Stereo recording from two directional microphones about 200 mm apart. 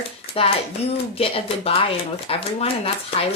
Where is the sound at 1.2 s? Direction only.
30° left (ahead or behind).